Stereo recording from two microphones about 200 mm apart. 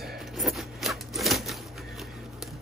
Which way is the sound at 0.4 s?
Centre (ahead or behind).